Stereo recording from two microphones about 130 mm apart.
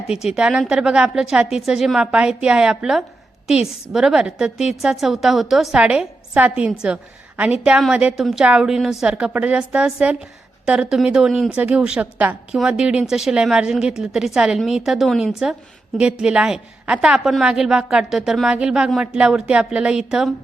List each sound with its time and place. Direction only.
0.3 s a woman's voice: 5° right (ahead or behind)